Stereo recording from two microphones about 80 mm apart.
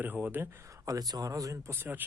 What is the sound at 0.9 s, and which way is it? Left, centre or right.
Speech, right.